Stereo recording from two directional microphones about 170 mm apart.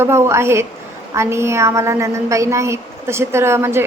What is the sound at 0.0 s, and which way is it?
A woman's voice, 15° right (ahead or behind).